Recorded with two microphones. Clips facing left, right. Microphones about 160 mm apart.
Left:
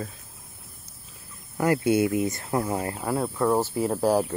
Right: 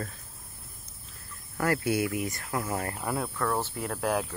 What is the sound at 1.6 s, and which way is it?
Speech, 20° left (ahead or behind).